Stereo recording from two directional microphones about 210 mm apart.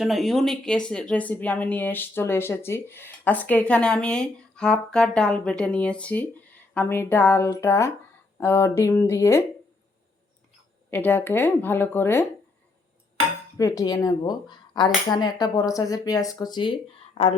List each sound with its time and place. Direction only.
0.0 s speech: centre (ahead or behind)
10.9 s speech: 10° left (ahead or behind)
13.6 s speech: 15° left (ahead or behind)